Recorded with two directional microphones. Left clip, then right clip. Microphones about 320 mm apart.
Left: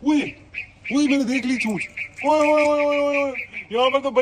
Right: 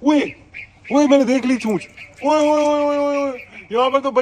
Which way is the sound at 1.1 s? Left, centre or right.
Right.